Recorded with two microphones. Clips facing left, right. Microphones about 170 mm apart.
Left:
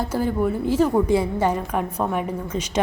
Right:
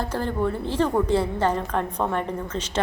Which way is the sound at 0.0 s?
10° left (ahead or behind).